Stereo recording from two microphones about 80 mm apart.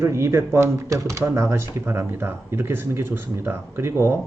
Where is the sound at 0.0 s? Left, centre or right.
Right.